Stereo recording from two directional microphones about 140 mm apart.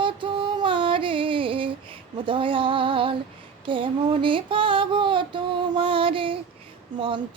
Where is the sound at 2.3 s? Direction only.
40° right (ahead or behind).